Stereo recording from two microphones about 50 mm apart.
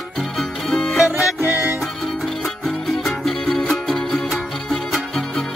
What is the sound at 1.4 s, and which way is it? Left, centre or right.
Music, right.